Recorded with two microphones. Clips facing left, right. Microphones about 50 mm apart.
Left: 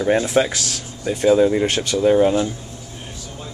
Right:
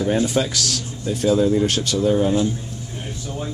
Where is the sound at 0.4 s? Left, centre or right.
Left.